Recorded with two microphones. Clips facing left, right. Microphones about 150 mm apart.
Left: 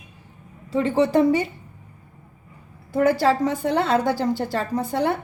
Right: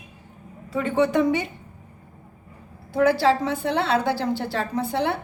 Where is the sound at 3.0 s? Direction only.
45° left (ahead or behind).